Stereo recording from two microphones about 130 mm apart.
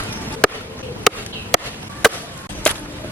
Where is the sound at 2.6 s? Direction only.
10° left (ahead or behind).